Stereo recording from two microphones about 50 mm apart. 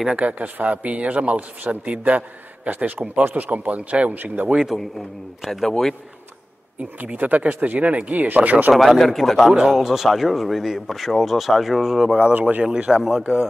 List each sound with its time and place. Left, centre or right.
0.1 s a man's voice: right
4.4 s a man's voice: right
5.4 s speech: centre
7.0 s a man's voice: right
8.7 s speech: centre
9.5 s speech: centre
12.2 s a man's voice: right
12.6 s a man's voice: centre